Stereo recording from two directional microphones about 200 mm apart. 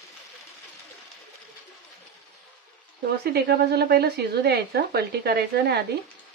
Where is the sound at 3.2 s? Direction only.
55° right (ahead or behind).